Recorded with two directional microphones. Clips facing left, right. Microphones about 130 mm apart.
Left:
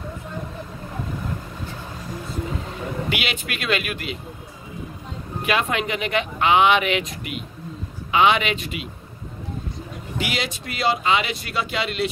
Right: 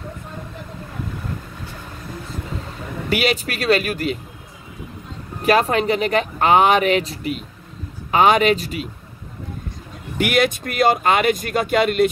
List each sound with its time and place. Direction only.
3.1 s speech: 40° right (ahead or behind)
5.4 s speech: 40° right (ahead or behind)
10.1 s speech: 55° right (ahead or behind)